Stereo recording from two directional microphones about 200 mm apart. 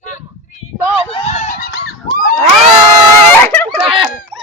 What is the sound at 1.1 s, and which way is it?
Honk, 35° left (ahead or behind).